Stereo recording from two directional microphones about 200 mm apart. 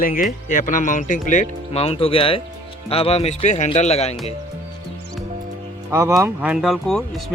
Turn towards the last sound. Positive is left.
turn(degrees=0)  # may be behind; listen again after turning